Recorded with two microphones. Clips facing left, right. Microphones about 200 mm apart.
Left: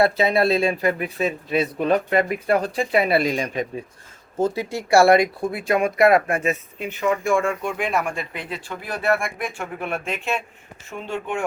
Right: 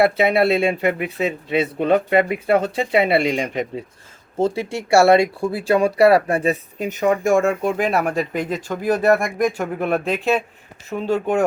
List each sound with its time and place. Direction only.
0.0 s speech: 25° right (ahead or behind); by 11.4 s 40° right (ahead or behind)